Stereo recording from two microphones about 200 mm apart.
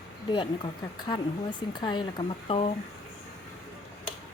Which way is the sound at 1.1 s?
20° left (ahead or behind).